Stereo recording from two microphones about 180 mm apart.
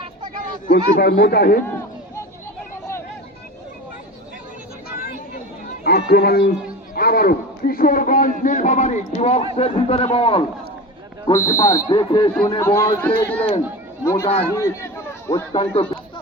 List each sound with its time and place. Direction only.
0.7 s speech: 60° left (ahead or behind)
4.9 s vehicle: 55° left (ahead or behind)
5.8 s a man's voice: 60° left (ahead or behind); by 10.4 s 30° left (ahead or behind)
11.3 s speech: 15° left (ahead or behind)
15.5 s speech: 30° left (ahead or behind)